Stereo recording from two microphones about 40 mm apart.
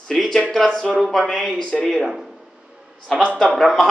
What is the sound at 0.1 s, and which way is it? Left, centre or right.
Speech, centre.